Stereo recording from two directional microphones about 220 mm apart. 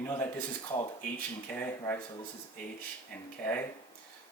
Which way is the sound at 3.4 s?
10° left (ahead or behind).